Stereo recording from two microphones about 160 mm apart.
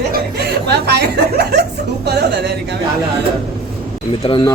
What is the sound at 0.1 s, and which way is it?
Speech, 90° right.